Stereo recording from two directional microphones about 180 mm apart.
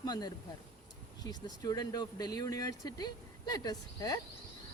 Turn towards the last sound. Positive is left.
turn(degrees=20)  # may be behind; listen again after turning